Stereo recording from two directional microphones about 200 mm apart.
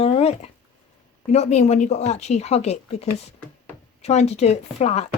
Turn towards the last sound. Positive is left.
turn(degrees=30)  # may be behind; listen again after turning